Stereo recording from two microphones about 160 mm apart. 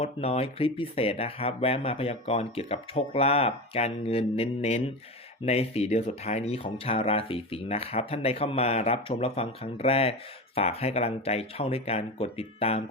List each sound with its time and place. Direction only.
0.0 s speech: 40° left (ahead or behind)